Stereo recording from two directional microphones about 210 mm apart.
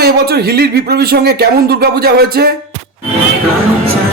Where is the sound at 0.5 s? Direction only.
50° right (ahead or behind).